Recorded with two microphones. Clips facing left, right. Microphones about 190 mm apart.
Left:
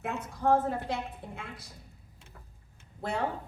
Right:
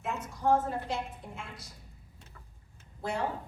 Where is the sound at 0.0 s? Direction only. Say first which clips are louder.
Left 1 dB; 60° left (ahead or behind).